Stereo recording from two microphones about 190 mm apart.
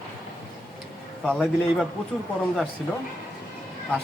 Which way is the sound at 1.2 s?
5° left (ahead or behind).